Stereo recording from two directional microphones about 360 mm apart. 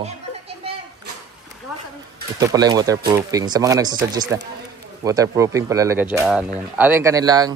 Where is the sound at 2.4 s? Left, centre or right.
Centre.